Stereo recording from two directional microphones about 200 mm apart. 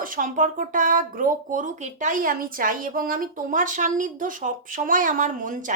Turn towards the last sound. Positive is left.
turn(degrees=-40)  # may be behind; listen again after turning